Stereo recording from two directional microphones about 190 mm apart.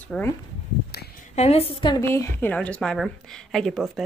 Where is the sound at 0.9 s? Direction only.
55° left (ahead or behind).